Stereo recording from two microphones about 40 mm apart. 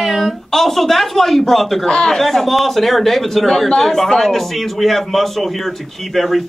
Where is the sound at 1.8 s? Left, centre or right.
Centre.